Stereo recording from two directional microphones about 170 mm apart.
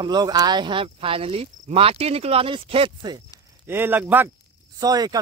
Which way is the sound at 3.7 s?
10° right (ahead or behind).